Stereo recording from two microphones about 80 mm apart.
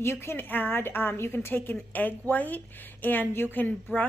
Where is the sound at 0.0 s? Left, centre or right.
Left.